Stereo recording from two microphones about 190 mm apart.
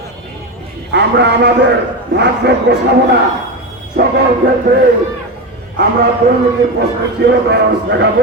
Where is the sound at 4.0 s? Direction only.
60° right (ahead or behind).